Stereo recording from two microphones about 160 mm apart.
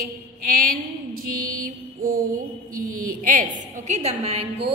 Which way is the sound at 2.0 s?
60° right (ahead or behind).